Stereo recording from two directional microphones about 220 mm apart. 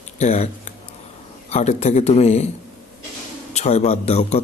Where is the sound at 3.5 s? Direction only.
30° left (ahead or behind).